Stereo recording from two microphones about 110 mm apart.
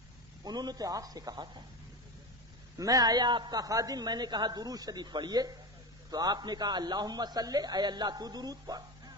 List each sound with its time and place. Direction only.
0.4 s a man's voice: 40° right (ahead or behind)
2.7 s a man's voice: 30° right (ahead or behind)